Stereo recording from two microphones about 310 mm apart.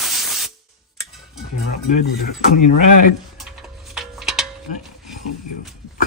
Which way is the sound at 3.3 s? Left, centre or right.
Centre.